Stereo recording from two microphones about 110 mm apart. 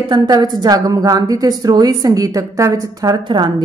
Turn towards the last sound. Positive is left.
turn(degrees=-40)  # may be behind; listen again after turning